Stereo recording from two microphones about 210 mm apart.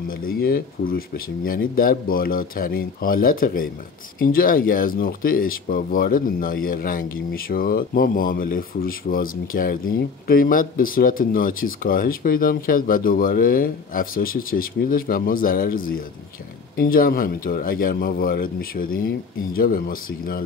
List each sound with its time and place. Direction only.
0.1 s speech: 45° left (ahead or behind)